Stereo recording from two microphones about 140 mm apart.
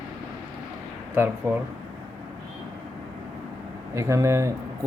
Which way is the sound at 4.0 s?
20° right (ahead or behind).